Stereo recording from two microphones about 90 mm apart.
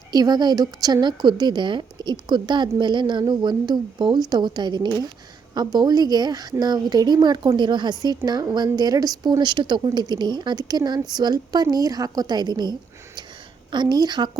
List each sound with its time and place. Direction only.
0.1 s speech: 50° right (ahead or behind)
1.0 s a woman's voice: 55° right (ahead or behind)
9.4 s a woman's voice: 60° right (ahead or behind)